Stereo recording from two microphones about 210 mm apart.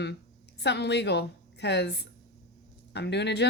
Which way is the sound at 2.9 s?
55° left (ahead or behind).